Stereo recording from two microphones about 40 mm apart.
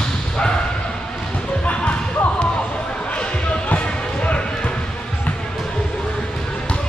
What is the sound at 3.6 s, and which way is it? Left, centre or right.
Basketball bounce, left.